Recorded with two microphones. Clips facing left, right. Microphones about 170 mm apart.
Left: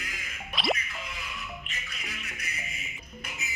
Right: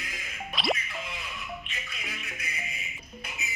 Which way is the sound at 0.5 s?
Centre (ahead or behind).